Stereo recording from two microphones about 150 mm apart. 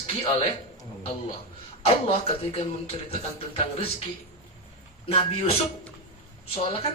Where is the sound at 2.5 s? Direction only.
40° left (ahead or behind).